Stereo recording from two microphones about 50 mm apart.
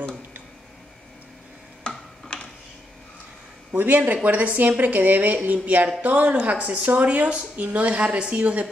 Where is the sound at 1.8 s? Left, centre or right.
Centre.